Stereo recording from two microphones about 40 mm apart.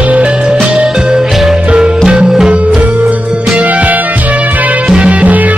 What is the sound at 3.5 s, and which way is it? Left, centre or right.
Music, right.